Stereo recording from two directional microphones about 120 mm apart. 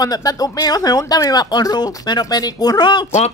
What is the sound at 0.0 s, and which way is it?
Speech, 30° left (ahead or behind).